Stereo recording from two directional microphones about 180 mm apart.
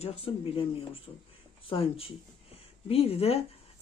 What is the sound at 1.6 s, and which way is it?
Speech, 30° left (ahead or behind).